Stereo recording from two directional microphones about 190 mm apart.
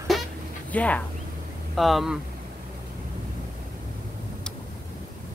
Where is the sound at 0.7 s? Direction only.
5° left (ahead or behind).